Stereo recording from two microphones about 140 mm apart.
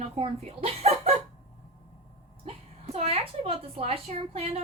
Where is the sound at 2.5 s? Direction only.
50° right (ahead or behind).